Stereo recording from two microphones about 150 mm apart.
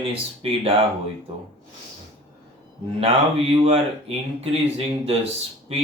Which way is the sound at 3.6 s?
40° right (ahead or behind).